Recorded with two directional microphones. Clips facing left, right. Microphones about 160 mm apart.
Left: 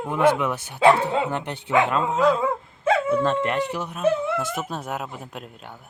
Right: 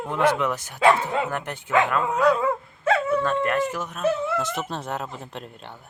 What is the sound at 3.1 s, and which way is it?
Speech, 25° left (ahead or behind).